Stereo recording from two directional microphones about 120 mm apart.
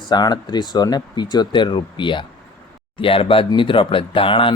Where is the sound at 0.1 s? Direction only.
35° left (ahead or behind).